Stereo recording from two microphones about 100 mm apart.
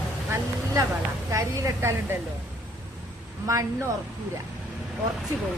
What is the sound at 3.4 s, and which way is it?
Speech, 35° right (ahead or behind).